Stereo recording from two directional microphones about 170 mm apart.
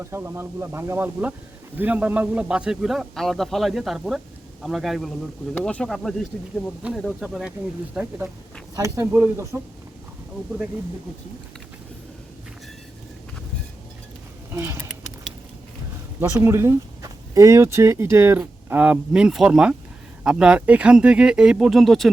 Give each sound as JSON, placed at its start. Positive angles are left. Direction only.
{"t": 0.0, "sound": "a man's voice", "side_deg": -15}
{"t": 8.7, "sound": "speech", "side_deg": -20}
{"t": 14.5, "sound": "speech", "side_deg": -15}
{"t": 16.3, "sound": "a man's voice", "side_deg": -15}